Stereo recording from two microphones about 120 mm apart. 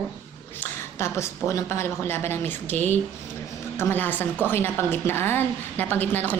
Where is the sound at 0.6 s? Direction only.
20° left (ahead or behind).